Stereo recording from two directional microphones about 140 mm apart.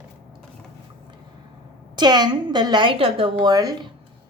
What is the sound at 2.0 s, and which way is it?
Speech, 30° right (ahead or behind).